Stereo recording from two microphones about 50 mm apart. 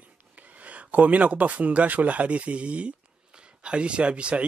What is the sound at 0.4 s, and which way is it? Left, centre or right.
Speech, right.